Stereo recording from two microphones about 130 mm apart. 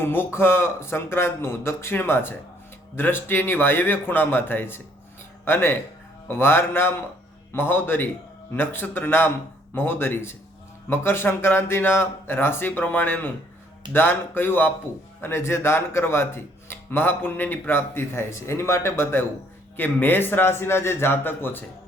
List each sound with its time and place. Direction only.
0.0 s a man's voice: 15° left (ahead or behind)